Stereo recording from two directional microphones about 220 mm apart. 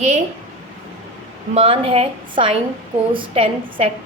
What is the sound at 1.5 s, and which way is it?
A woman's voice, 25° right (ahead or behind).